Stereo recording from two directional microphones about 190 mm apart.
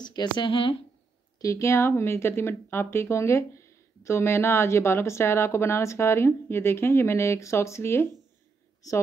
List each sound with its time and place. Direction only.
0.0 s a woman's voice: 25° left (ahead or behind)
1.4 s speech: 15° left (ahead or behind)